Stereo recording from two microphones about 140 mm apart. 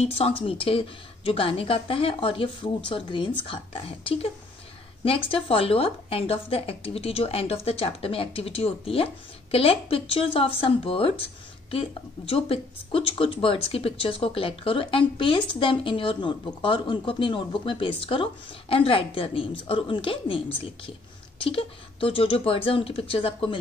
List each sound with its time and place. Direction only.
0.0 s speech: 45° left (ahead or behind)